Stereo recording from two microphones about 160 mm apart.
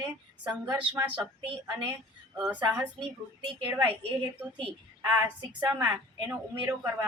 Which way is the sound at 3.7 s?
20° right (ahead or behind).